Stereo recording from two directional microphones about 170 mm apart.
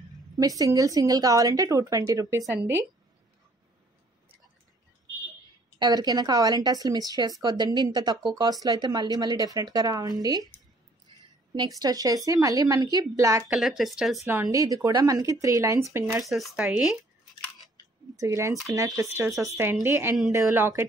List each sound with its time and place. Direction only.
0.4 s speech: 20° right (ahead or behind)
5.8 s speech: 20° right (ahead or behind)
11.5 s speech: 25° right (ahead or behind)
13.5 s speech: centre (ahead or behind)
14.2 s speech: 15° right (ahead or behind)
16.2 s speech: centre (ahead or behind)
18.1 s speech: 20° right (ahead or behind)